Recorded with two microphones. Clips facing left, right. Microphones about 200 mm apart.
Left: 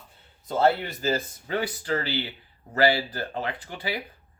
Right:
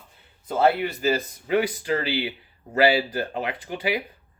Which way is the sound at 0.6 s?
15° right (ahead or behind).